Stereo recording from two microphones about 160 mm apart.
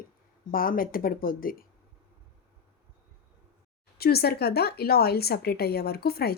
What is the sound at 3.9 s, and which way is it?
Speech, 75° left (ahead or behind).